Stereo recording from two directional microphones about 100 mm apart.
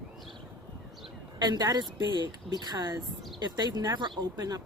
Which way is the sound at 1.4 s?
45° right (ahead or behind).